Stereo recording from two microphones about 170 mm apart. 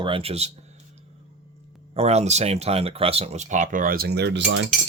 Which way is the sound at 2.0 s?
40° right (ahead or behind).